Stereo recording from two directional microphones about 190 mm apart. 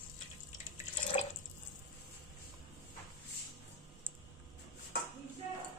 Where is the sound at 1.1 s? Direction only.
30° left (ahead or behind).